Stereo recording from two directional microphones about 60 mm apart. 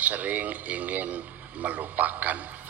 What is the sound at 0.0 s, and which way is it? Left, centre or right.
Speech, right.